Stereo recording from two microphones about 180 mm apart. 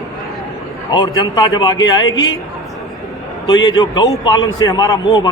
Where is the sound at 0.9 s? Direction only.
25° left (ahead or behind).